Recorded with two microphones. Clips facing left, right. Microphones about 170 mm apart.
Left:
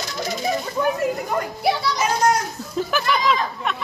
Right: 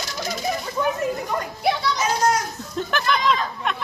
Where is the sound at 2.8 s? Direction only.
5° left (ahead or behind).